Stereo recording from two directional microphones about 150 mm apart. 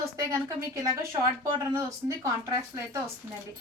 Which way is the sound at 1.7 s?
20° right (ahead or behind).